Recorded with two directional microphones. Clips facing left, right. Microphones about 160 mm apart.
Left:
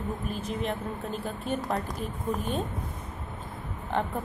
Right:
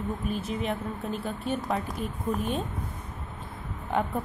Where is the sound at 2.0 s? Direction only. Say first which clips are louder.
Right 1 dB; 40° left (ahead or behind).